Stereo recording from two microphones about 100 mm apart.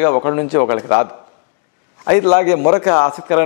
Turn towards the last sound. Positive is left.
turn(degrees=15)  # may be behind; listen again after turning